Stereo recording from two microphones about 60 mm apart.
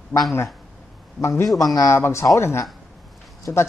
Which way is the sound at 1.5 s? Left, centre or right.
Centre.